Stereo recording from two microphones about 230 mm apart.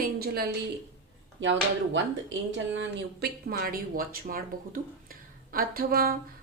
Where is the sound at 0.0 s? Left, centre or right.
Right.